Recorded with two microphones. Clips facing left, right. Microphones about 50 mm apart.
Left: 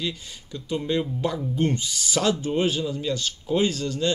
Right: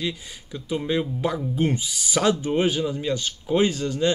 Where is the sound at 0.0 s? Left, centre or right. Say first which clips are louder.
Right 1 dB; centre.